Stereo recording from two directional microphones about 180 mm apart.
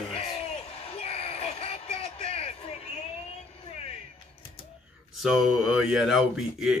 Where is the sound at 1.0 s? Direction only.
35° left (ahead or behind).